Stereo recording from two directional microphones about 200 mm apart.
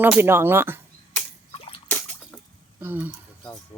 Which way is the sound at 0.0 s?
10° right (ahead or behind).